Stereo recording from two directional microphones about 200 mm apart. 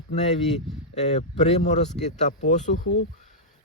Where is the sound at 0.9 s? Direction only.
35° left (ahead or behind).